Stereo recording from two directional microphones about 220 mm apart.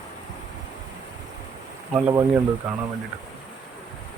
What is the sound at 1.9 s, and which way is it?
Speech, 10° right (ahead or behind).